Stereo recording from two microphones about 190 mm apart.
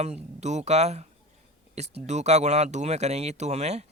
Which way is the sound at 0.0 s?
35° right (ahead or behind).